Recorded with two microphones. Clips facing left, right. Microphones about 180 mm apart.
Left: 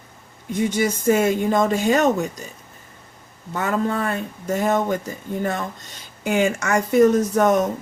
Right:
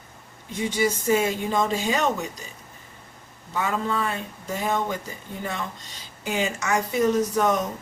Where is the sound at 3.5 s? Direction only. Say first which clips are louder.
Left 4 dB; 50° left (ahead or behind).